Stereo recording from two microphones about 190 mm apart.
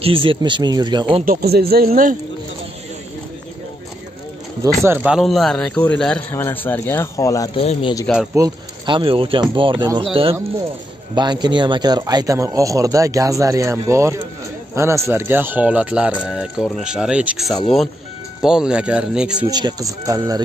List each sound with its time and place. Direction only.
0.0 s speech: 30° right (ahead or behind)
1.2 s a man's voice: 50° right (ahead or behind)
4.8 s speech: 5° right (ahead or behind); by 7.5 s 15° left (ahead or behind)
7.5 s speech: 30° left (ahead or behind)
7.9 s speech: 15° left (ahead or behind)
8.4 s speech: 25° right (ahead or behind)
11.1 s speech: 25° right (ahead or behind); by 19.4 s 5° right (ahead or behind)
19.5 s speech: 20° right (ahead or behind)